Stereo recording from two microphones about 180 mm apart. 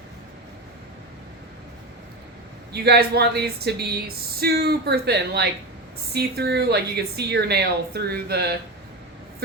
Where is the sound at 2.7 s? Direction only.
65° right (ahead or behind).